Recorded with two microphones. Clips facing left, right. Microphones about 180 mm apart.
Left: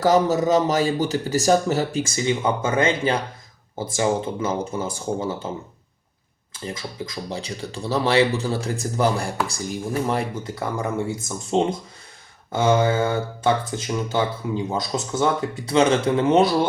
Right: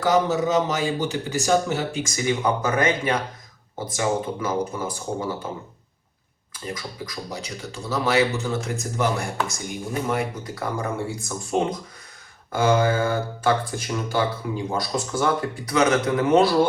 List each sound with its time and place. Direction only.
0.0 s a man's voice: 35° left (ahead or behind)
6.5 s a man's voice: 25° left (ahead or behind)